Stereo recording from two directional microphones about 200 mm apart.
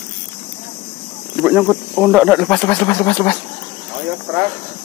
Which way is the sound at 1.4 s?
5° right (ahead or behind).